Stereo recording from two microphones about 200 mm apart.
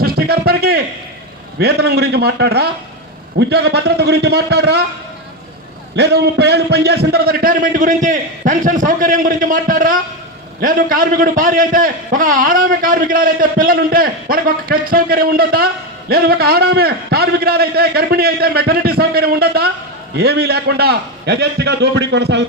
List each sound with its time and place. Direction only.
0.0 s a sound: 50° right (ahead or behind)
1.5 s a man's voice: 55° right (ahead or behind)
6.0 s a man's voice: 55° right (ahead or behind)